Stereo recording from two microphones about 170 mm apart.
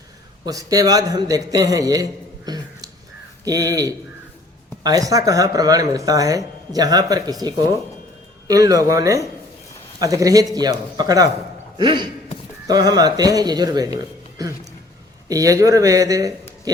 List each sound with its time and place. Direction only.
0.4 s speech: 20° right (ahead or behind)
3.4 s speech: 20° right (ahead or behind)